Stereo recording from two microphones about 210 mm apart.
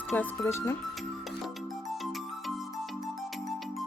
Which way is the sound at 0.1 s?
10° left (ahead or behind).